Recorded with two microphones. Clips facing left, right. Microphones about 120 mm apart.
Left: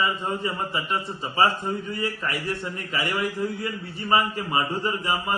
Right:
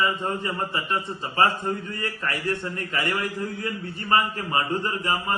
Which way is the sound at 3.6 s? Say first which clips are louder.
Even; 10° left (ahead or behind).